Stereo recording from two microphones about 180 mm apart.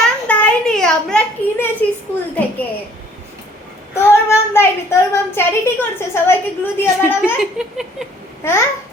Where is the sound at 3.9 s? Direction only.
15° left (ahead or behind).